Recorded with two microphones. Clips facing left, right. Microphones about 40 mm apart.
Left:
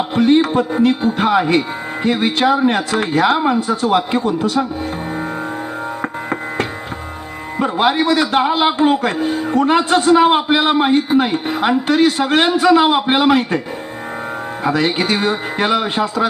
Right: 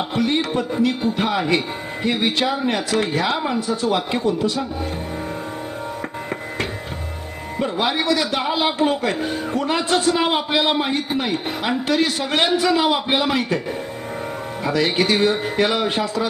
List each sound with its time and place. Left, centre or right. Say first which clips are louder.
0.1 s speech: left 10 dB; left
7.5 s speech: left 6 dB; left
14.6 s speech: left 3 dB; left